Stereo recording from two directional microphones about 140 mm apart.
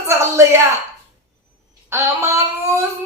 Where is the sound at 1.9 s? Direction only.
20° right (ahead or behind).